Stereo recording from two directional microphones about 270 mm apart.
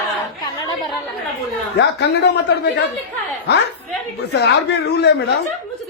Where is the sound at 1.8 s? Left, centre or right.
Left.